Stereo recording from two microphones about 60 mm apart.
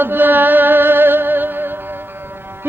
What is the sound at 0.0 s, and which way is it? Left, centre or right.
Music, right.